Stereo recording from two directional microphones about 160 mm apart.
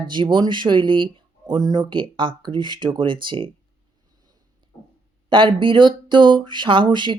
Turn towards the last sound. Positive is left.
turn(degrees=-30)  # may be behind; listen again after turning